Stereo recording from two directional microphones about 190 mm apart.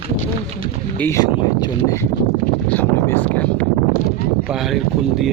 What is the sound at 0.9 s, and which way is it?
Speech, 15° left (ahead or behind).